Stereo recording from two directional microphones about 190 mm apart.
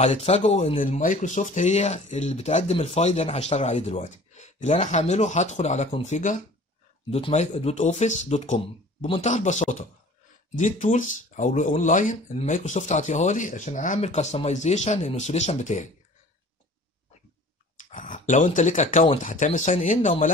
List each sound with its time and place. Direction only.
0.0 s speech: 35° left (ahead or behind)
17.9 s speech: 45° left (ahead or behind)